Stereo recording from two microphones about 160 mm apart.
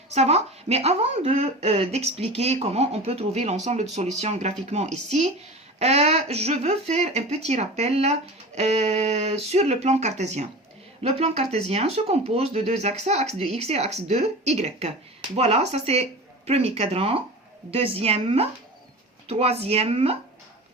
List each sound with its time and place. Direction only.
0.1 s a woman's voice: 40° right (ahead or behind)